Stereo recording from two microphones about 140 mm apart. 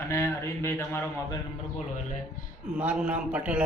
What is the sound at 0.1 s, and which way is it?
Speech, 20° left (ahead or behind).